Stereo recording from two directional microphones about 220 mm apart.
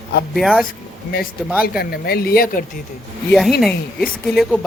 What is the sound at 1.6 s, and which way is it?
Speech, 45° left (ahead or behind).